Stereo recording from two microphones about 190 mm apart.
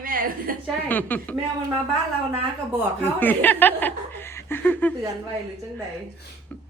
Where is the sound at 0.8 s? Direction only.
10° left (ahead or behind).